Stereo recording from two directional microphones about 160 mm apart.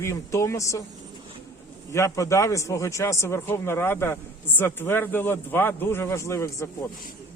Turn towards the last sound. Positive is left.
turn(degrees=15)  # may be behind; listen again after turning